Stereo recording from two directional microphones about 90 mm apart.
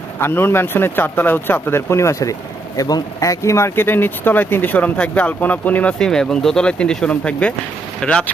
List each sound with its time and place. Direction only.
0.2 s speech: 25° left (ahead or behind)
6.0 s speech: 5° left (ahead or behind)